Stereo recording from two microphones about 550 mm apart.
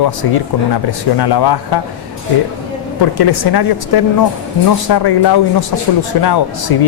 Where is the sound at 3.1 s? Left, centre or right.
Left.